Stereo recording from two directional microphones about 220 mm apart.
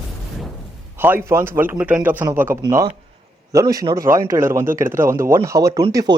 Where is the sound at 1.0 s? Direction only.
10° right (ahead or behind).